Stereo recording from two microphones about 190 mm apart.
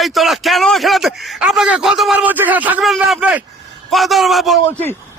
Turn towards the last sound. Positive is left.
turn(degrees=0)  # may be behind; listen again after turning